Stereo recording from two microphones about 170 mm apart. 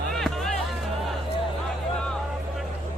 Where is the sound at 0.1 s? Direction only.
Centre (ahead or behind).